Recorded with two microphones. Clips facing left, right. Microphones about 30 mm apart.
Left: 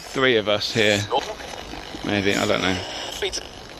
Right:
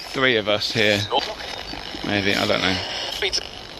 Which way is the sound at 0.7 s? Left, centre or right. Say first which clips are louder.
Even; right.